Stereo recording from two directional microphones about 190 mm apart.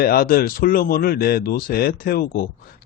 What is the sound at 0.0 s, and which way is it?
Speech, 50° left (ahead or behind).